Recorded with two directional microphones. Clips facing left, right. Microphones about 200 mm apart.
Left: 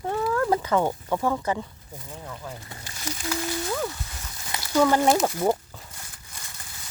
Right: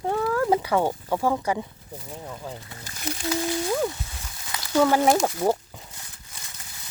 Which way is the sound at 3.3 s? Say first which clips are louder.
Right 4 dB; 20° right (ahead or behind).